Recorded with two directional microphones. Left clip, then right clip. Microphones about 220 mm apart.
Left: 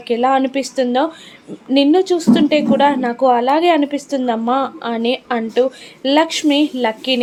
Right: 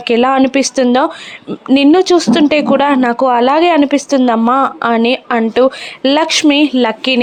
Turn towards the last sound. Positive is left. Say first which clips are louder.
# right 5 dB
turn(degrees=-20)  # may be behind; listen again after turning